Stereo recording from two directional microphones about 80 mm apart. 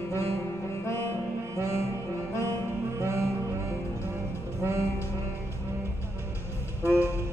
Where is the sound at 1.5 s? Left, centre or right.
Right.